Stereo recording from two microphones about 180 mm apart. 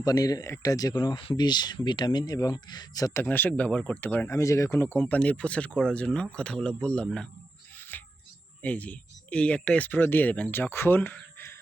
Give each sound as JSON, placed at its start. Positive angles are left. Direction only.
{"t": 0.0, "sound": "speech", "side_deg": 20}
{"t": 7.8, "sound": "a sound", "side_deg": 10}
{"t": 8.6, "sound": "speech", "side_deg": 10}